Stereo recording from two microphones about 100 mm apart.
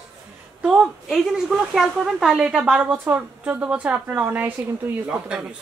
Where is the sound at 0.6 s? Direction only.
5° right (ahead or behind).